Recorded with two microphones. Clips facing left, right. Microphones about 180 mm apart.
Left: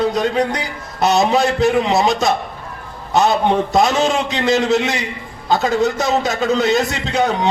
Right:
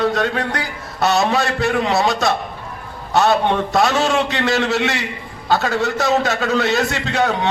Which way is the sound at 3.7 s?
20° left (ahead or behind).